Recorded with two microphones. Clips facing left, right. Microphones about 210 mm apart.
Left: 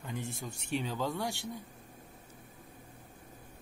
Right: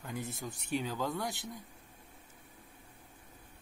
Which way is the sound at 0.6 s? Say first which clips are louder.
Left 1 dB; centre (ahead or behind).